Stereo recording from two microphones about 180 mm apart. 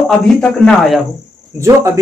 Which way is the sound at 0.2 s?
5° left (ahead or behind).